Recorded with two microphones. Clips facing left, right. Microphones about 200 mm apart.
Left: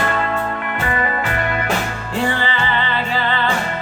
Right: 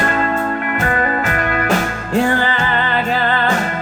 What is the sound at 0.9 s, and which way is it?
Music, 45° right (ahead or behind).